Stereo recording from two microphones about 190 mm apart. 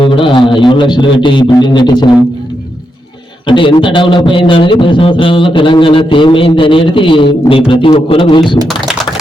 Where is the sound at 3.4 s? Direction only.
25° left (ahead or behind).